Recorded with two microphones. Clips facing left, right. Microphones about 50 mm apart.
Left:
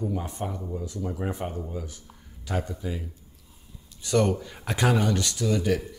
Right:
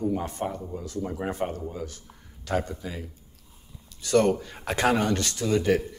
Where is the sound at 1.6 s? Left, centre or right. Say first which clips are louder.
Right 1 dB; centre.